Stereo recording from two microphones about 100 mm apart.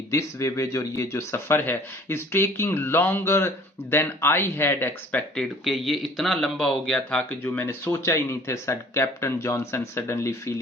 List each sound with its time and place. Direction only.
0.1 s speech: 30° left (ahead or behind)
5.3 s speech: 5° left (ahead or behind); by 10.5 s 25° left (ahead or behind)